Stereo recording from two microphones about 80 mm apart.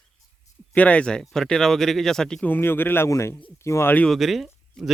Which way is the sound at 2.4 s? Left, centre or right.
Left.